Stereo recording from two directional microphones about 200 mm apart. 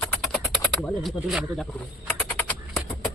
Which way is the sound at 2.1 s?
5° left (ahead or behind).